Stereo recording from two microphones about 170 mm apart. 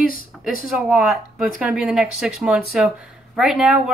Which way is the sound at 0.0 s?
60° left (ahead or behind).